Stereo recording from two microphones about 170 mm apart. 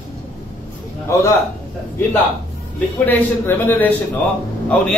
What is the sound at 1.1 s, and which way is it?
Speech, 15° left (ahead or behind).